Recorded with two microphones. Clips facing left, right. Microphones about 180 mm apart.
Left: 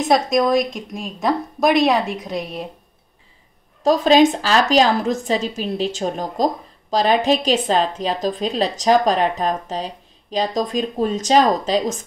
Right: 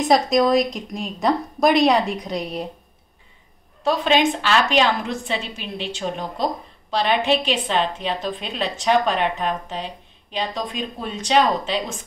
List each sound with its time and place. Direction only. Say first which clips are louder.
0.1 s a woman's voice: even; centre (ahead or behind)
3.8 s a woman's voice: left 5 dB; 40° left (ahead or behind)